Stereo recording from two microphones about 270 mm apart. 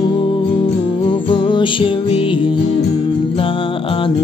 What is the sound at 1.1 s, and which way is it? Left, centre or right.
Music, centre.